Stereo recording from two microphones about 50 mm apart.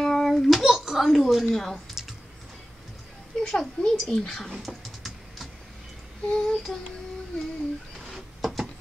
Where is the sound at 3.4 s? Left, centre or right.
Centre.